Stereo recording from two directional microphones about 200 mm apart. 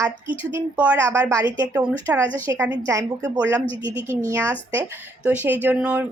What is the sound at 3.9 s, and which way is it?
Speech, 25° left (ahead or behind).